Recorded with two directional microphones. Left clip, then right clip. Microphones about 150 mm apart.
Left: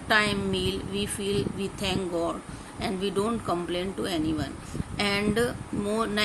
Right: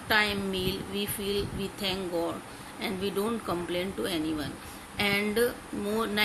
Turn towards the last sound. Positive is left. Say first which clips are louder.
# left 1 dB
turn(degrees=25)  # may be behind; listen again after turning